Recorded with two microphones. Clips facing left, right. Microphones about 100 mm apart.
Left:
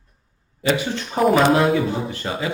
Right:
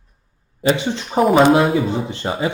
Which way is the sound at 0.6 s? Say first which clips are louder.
Right 3 dB; 25° right (ahead or behind).